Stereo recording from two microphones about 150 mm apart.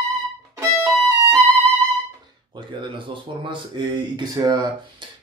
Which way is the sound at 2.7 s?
30° right (ahead or behind).